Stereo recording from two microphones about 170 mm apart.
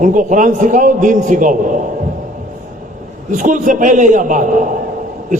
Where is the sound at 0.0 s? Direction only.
50° right (ahead or behind).